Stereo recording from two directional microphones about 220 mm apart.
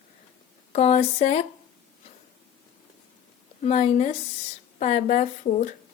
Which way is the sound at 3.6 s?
30° left (ahead or behind).